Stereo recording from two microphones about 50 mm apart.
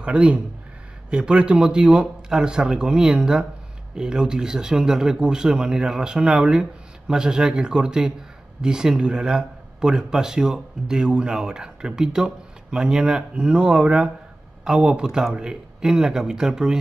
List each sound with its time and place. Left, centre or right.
0.0 s speech: right